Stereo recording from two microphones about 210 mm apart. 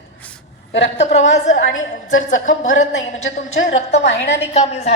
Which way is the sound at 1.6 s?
70° left (ahead or behind).